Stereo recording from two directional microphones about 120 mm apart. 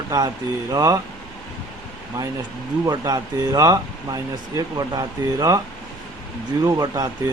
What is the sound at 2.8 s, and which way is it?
Speech, 30° right (ahead or behind).